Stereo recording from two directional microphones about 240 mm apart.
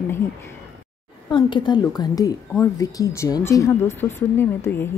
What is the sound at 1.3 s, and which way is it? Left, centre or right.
A woman's voice, centre.